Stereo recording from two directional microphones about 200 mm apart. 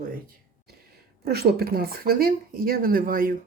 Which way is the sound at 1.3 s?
50° right (ahead or behind).